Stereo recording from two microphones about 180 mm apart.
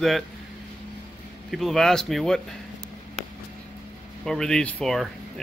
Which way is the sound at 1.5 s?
Centre (ahead or behind).